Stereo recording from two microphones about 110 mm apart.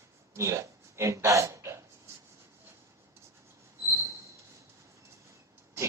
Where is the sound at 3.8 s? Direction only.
25° right (ahead or behind).